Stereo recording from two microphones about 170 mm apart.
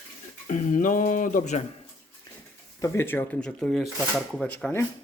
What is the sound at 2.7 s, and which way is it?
Speech, 15° left (ahead or behind).